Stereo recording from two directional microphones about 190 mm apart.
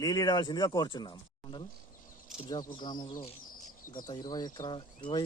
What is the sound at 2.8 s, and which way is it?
Speech, 20° left (ahead or behind).